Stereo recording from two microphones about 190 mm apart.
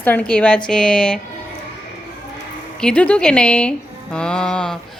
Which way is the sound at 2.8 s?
5° left (ahead or behind).